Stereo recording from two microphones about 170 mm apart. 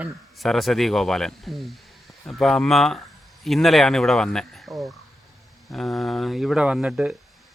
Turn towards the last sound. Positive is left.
turn(degrees=-5)  # may be behind; listen again after turning